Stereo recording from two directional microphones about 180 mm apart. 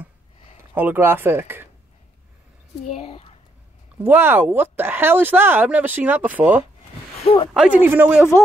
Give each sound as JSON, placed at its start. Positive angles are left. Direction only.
{"t": 0.7, "sound": "speech", "side_deg": -10}
{"t": 2.9, "sound": "speech", "side_deg": 35}
{"t": 4.0, "sound": "speech", "side_deg": -10}
{"t": 8.2, "sound": "a man's voice", "side_deg": 15}